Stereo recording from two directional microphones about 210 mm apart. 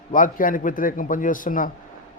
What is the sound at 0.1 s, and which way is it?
A man's voice, 40° left (ahead or behind).